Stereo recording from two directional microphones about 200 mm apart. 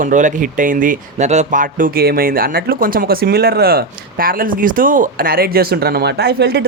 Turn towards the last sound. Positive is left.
turn(degrees=-55)  # may be behind; listen again after turning